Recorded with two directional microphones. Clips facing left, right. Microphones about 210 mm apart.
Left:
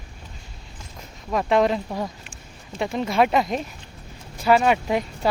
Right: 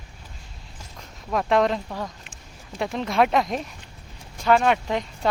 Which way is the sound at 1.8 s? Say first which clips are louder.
Left 3 dB; 15° left (ahead or behind).